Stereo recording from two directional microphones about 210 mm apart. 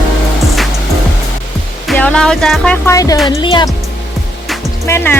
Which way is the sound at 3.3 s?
25° left (ahead or behind).